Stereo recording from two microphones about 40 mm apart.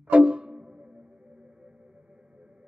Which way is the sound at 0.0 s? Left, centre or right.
Right.